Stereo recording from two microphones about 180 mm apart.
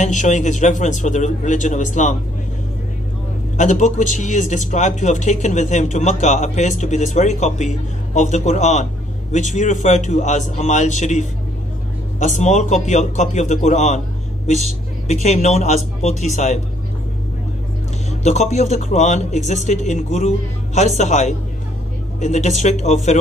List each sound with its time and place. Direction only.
0.0 s a man's voice: 40° left (ahead or behind)
3.5 s speech: 40° left (ahead or behind)
15.2 s speech: 40° left (ahead or behind)
18.2 s speech: 40° left (ahead or behind)